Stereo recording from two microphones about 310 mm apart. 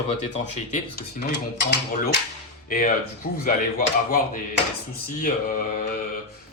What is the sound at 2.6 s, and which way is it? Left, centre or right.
Speech, left.